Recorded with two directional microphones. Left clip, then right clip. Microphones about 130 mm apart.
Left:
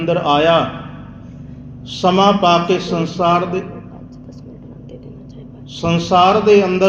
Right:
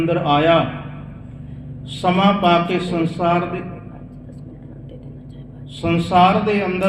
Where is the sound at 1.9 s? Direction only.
40° left (ahead or behind).